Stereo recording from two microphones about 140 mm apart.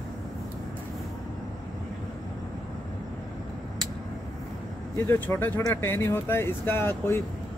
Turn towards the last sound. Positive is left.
turn(degrees=15)  # may be behind; listen again after turning